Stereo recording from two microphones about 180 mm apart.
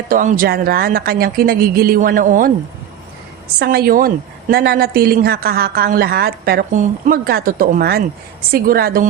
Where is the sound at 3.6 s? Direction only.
60° right (ahead or behind).